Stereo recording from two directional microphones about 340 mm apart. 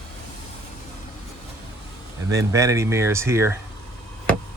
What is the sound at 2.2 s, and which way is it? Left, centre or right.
Speech, centre.